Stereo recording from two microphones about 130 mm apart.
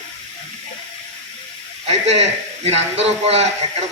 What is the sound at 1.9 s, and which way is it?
A man's voice, 60° right (ahead or behind).